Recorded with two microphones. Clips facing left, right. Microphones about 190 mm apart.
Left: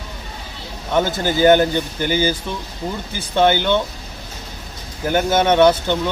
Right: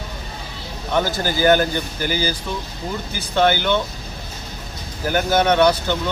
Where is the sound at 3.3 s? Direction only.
20° left (ahead or behind).